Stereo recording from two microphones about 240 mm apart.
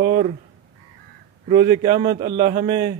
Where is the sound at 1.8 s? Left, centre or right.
Right.